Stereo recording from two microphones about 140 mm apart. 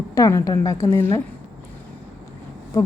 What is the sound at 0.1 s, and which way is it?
Speech, 25° left (ahead or behind).